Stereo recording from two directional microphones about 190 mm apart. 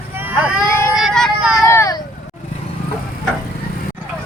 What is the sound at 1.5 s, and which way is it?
Vehicle, 15° left (ahead or behind).